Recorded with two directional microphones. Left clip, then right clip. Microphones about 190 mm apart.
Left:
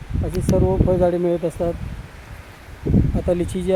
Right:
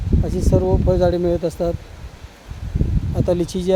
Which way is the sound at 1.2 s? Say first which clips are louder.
Right 1 dB; 10° right (ahead or behind).